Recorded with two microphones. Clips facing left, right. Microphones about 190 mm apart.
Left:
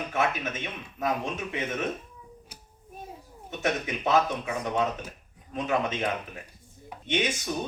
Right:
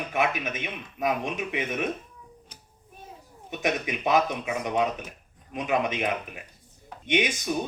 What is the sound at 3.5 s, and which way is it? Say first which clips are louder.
A man's voice: right 1 dB; 15° right (ahead or behind).